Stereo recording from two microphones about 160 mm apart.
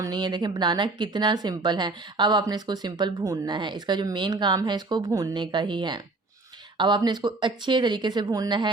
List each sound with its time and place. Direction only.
0.0 s a woman's voice: 25° right (ahead or behind)